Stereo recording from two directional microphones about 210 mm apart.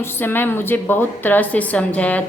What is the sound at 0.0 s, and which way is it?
A woman's voice, 10° left (ahead or behind).